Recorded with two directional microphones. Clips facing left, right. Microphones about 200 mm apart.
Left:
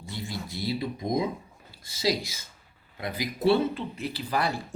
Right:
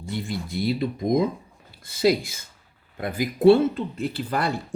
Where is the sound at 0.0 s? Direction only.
55° right (ahead or behind).